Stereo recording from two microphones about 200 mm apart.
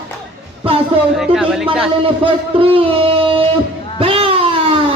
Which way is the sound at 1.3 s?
5° right (ahead or behind).